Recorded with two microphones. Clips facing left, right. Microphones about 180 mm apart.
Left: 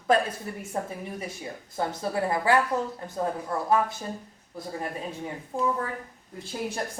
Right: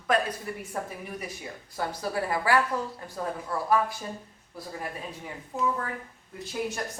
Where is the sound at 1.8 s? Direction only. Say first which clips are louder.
Left 2 dB; 25° left (ahead or behind).